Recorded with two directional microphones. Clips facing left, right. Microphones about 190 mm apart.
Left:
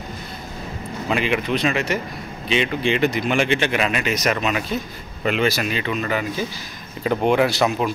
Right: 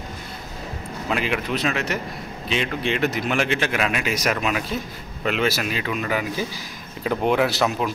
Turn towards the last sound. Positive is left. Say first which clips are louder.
# left 2 dB
turn(degrees=0)  # may be behind; listen again after turning